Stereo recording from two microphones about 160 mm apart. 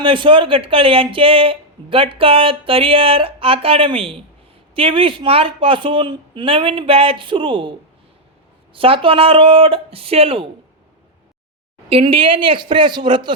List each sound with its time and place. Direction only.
0.0 s speech: 30° right (ahead or behind)
11.9 s a man's voice: 35° right (ahead or behind)